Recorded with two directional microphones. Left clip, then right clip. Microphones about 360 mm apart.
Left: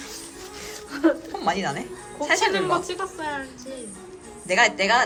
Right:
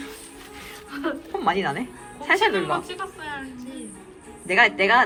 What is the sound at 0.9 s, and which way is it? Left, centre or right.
Speech, left.